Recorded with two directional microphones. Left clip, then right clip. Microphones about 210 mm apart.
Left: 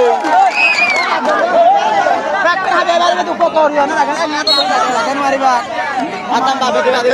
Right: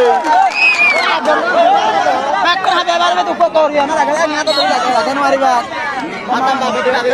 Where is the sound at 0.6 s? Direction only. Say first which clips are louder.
Right 1 dB; 50° right (ahead or behind).